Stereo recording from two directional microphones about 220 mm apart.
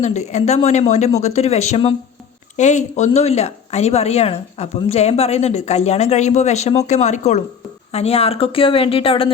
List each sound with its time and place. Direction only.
0.0 s a woman's voice: 30° left (ahead or behind)